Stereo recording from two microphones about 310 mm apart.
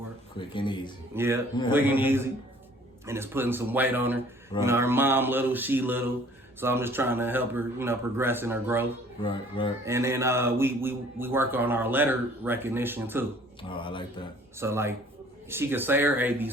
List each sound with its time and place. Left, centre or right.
0.3 s mantra: centre
1.1 s speech: centre
9.2 s mantra: centre
9.8 s speech: centre
13.6 s mantra: centre
14.6 s speech: centre